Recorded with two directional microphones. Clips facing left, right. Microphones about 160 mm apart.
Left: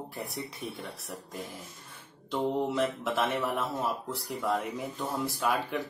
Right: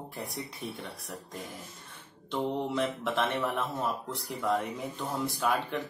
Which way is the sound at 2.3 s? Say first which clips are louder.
Left 2 dB; 5° left (ahead or behind).